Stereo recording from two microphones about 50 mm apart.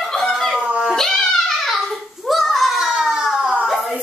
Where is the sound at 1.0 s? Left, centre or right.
Centre.